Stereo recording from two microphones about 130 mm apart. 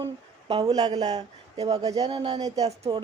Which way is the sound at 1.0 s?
55° right (ahead or behind).